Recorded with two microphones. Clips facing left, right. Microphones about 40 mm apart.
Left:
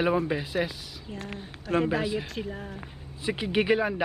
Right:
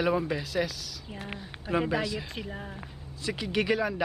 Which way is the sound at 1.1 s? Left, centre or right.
Centre.